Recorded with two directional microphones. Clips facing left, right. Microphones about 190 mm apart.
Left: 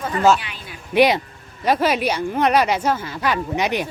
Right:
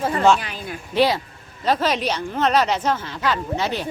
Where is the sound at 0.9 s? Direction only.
15° left (ahead or behind).